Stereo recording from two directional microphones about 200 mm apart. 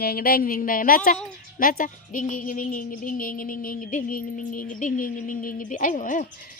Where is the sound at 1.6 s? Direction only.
45° left (ahead or behind).